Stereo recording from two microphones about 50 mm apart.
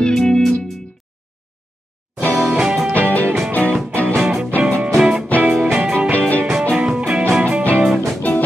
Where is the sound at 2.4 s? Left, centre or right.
Centre.